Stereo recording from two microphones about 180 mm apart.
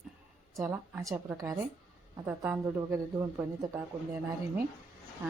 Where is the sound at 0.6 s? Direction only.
10° right (ahead or behind).